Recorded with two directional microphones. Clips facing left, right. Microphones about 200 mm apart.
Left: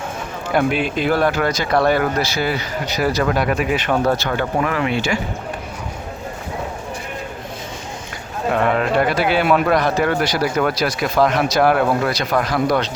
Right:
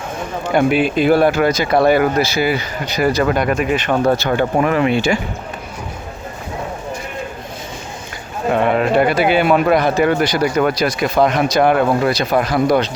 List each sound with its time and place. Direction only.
0.5 s speech: 5° right (ahead or behind)
4.3 s speech: 25° right (ahead or behind)
8.5 s speech: 5° right (ahead or behind)
12.3 s speech: 25° right (ahead or behind)